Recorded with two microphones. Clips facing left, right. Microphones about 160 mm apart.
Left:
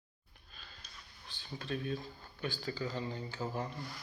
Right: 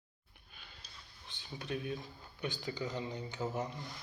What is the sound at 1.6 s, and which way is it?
Speech, 15° right (ahead or behind).